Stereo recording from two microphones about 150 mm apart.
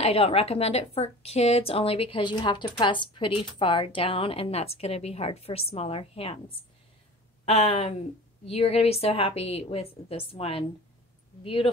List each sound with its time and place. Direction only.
0.0 s a woman's voice: 40° left (ahead or behind)
7.4 s a woman's voice: 45° left (ahead or behind)